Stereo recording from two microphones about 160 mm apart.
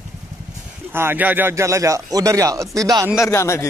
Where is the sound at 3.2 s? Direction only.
15° left (ahead or behind).